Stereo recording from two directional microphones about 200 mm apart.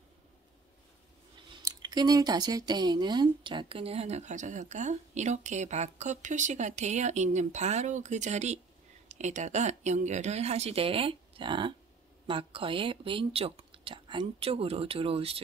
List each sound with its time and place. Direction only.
1.6 s speech: 20° right (ahead or behind)